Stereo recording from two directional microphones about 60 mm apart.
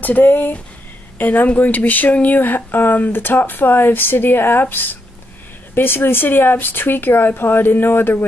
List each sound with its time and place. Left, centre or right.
0.0 s speech: left